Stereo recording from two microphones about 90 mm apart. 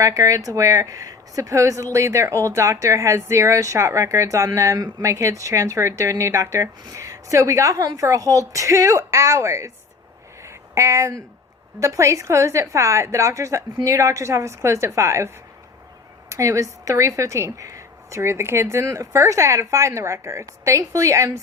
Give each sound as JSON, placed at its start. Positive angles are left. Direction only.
{"t": 0.0, "sound": "a woman's voice", "side_deg": -35}
{"t": 10.4, "sound": "a sound", "side_deg": -35}
{"t": 11.8, "sound": "a woman's voice", "side_deg": -35}
{"t": 16.3, "sound": "a woman's voice", "side_deg": -35}